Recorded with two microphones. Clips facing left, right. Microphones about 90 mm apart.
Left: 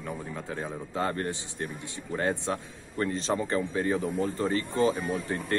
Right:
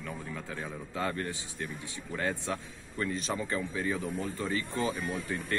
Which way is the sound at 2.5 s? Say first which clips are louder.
Left 4 dB; 40° left (ahead or behind).